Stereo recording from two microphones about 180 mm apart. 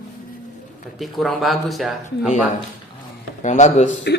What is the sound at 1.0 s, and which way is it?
Speech, centre (ahead or behind).